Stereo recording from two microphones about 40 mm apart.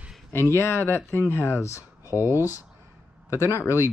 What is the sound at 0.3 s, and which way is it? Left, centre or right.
Speech, left.